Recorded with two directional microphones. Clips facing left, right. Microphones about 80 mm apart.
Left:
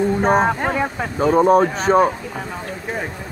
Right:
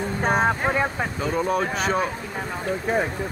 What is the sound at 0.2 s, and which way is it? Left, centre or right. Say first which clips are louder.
Speech: even; left.